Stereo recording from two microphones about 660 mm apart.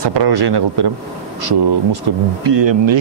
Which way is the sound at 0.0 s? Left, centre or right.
Right.